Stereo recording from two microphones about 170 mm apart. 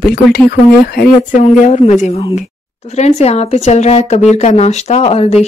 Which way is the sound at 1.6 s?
40° left (ahead or behind).